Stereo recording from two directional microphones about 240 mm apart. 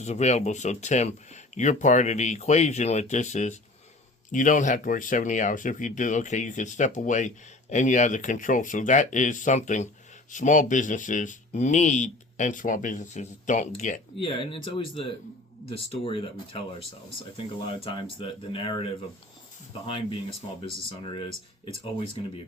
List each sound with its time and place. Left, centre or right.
0.0 s speech: left
20.7 s speech: left